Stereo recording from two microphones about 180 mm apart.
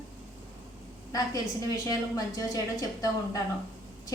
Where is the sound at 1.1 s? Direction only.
20° left (ahead or behind).